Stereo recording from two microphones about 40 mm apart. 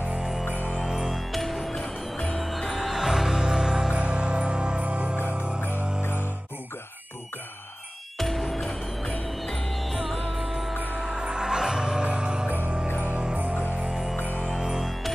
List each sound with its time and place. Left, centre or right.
0.2 s music: centre
0.5 s music: left
0.7 s music: centre
1.3 s music: centre
1.7 s music: centre
2.3 s music: centre; by 5.6 s right
8.2 s music: centre
8.6 s music: left
9.5 s music: centre
11.0 s music: centre
12.0 s music: right
12.8 s music: left
14.1 s music: left
14.5 s music: centre